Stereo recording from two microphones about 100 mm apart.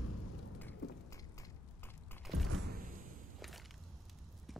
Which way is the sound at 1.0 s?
35° left (ahead or behind).